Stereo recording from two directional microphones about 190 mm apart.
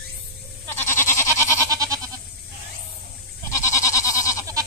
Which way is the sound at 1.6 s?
20° right (ahead or behind).